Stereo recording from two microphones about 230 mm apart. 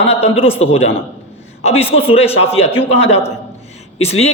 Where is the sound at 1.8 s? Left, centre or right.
Left.